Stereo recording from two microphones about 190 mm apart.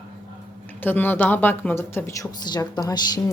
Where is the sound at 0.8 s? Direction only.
10° left (ahead or behind).